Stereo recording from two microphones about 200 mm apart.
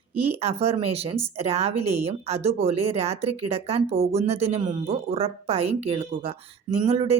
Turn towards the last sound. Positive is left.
turn(degrees=-30)  # may be behind; listen again after turning